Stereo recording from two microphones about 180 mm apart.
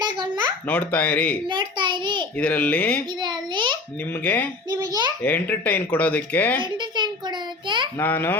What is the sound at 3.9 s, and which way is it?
Speech, 10° left (ahead or behind).